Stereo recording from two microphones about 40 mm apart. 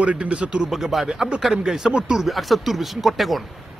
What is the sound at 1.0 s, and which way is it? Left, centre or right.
Speech, centre.